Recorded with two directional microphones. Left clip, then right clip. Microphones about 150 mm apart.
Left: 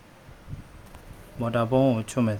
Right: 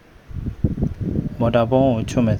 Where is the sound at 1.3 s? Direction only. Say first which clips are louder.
Right 6 dB; 30° right (ahead or behind).